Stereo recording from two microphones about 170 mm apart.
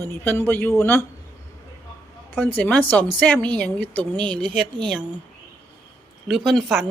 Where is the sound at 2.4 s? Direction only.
10° left (ahead or behind).